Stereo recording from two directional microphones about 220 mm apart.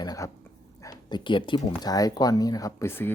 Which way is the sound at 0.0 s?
15° left (ahead or behind).